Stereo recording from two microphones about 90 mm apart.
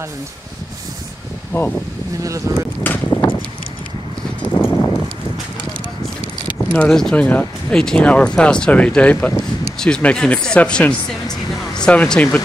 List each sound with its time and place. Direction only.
2.5 s speech: 35° right (ahead or behind)
2.8 s speech: 25° left (ahead or behind)
4.6 s clip-clop: 25° left (ahead or behind)
6.7 s speech: 10° left (ahead or behind)